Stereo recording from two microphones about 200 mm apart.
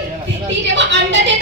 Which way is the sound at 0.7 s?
65° right (ahead or behind).